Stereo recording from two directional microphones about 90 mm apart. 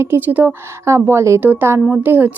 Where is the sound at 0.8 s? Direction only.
30° right (ahead or behind).